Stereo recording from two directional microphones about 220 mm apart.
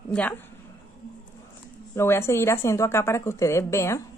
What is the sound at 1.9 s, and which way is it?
A woman's voice, 10° left (ahead or behind).